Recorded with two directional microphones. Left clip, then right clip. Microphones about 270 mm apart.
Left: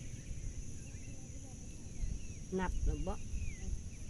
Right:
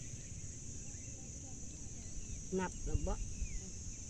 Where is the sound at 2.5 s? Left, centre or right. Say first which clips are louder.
Even; centre.